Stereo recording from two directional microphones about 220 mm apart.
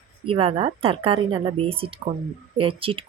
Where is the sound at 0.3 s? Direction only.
25° right (ahead or behind).